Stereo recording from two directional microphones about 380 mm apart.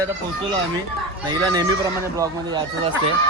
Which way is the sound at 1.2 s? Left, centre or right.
Centre.